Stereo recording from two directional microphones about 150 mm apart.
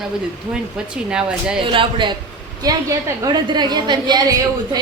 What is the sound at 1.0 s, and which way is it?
Speech, 5° right (ahead or behind).